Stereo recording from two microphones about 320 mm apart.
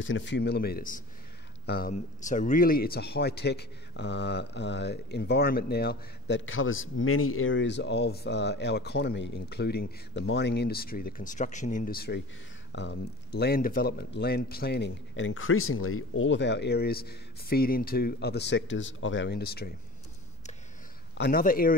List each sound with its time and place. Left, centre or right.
0.0 s a man's voice: left
21.2 s speech: left